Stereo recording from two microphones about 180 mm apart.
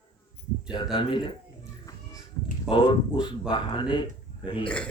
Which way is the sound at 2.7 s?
25° left (ahead or behind).